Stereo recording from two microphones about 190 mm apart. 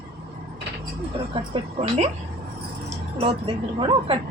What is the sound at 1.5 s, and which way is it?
Speech, 35° right (ahead or behind).